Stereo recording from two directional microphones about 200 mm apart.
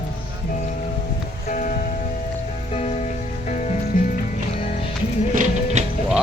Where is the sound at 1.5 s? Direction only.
40° left (ahead or behind).